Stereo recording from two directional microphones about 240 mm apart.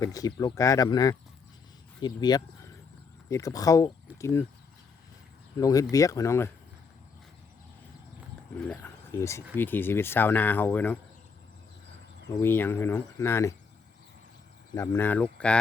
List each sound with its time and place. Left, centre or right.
0.0 s speech: centre
5.5 s speech: centre
8.5 s speech: centre
12.3 s speech: centre
14.8 s speech: centre